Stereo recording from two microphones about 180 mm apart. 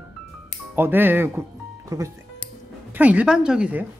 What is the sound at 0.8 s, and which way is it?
A woman's voice, 10° right (ahead or behind).